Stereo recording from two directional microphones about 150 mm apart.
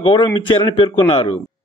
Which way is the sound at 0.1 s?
35° left (ahead or behind).